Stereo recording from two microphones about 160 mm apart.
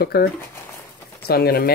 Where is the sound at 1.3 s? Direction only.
80° left.